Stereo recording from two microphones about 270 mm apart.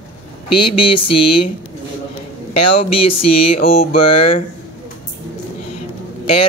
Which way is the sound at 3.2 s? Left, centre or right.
Left.